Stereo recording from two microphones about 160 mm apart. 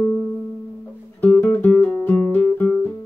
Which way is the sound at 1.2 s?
10° left (ahead or behind).